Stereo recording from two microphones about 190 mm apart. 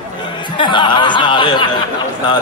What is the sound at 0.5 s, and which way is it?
A man's voice, 25° left (ahead or behind).